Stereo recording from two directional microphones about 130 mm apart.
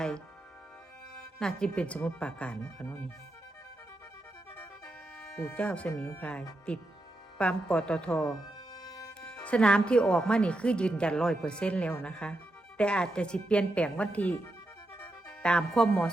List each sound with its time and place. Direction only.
1.4 s speech: 5° left (ahead or behind)
5.5 s speech: 10° left (ahead or behind)
8.7 s music: 30° left (ahead or behind)
9.2 s speech: 10° left (ahead or behind)
15.4 s speech: 5° left (ahead or behind)